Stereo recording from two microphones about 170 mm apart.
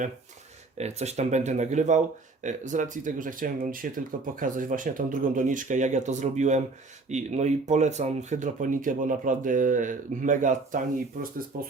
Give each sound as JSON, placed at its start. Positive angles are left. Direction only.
{"t": 0.8, "sound": "speech", "side_deg": -40}